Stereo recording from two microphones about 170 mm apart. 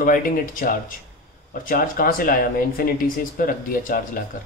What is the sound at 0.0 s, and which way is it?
Speech, 55° left (ahead or behind).